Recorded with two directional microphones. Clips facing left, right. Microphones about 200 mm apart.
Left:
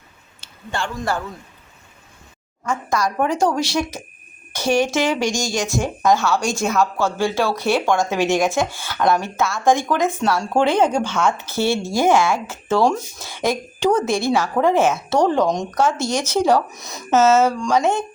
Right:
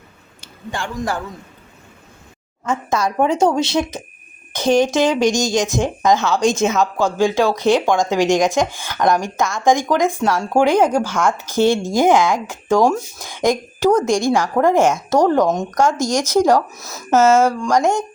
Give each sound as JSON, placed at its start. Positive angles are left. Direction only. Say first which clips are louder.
{"t": 0.4, "sound": "speech", "louder": "even", "side_deg": -15}
{"t": 2.6, "sound": "a woman's voice", "louder": "right 2 dB", "side_deg": -25}